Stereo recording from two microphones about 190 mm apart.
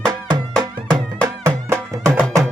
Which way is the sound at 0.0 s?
20° right (ahead or behind).